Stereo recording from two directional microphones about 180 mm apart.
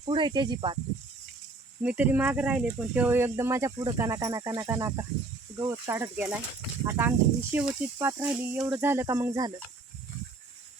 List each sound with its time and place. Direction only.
0.0 s speech: 25° right (ahead or behind)
1.8 s speech: 10° right (ahead or behind)